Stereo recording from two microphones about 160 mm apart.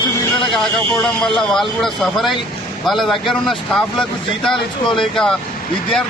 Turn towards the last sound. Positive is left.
turn(degrees=5)  # may be behind; listen again after turning